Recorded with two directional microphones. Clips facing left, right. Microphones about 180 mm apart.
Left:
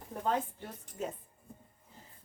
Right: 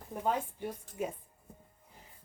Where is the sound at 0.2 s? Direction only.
10° right (ahead or behind).